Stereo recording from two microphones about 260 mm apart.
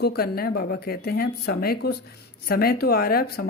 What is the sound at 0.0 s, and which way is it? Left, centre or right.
Speech, left.